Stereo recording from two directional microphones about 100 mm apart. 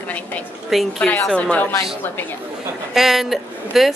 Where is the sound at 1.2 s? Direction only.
10° left (ahead or behind).